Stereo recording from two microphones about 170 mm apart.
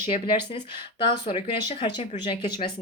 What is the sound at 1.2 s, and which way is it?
A woman's voice, 30° left (ahead or behind).